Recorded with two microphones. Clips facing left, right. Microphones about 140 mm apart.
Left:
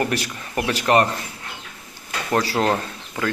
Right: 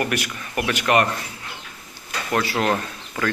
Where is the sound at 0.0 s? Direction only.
30° left (ahead or behind).